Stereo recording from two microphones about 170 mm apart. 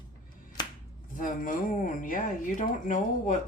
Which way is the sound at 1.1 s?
50° left (ahead or behind).